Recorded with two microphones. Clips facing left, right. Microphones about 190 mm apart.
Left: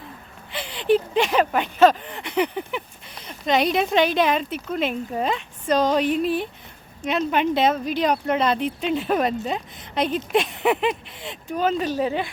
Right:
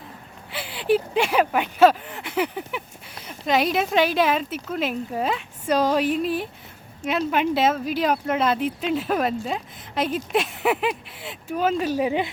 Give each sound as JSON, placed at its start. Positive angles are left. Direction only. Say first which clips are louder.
{"t": 0.5, "sound": "speech", "louder": "left 2 dB", "side_deg": -5}